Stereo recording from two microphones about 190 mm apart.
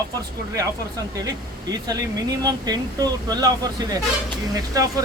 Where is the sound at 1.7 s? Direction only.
20° right (ahead or behind).